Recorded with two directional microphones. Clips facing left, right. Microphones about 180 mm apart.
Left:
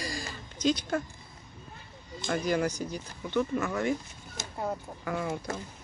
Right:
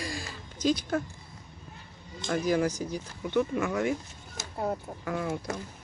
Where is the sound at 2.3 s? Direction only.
5° right (ahead or behind).